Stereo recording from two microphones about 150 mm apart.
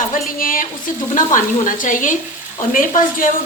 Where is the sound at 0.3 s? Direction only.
65° left (ahead or behind).